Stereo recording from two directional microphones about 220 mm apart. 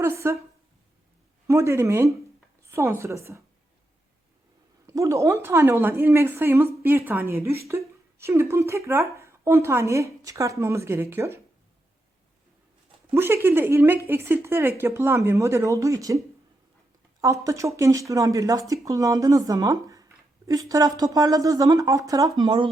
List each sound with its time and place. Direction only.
0.0 s speech: 10° right (ahead or behind)
1.5 s speech: 10° right (ahead or behind)
4.9 s speech: 15° right (ahead or behind)
13.1 s speech: 10° right (ahead or behind)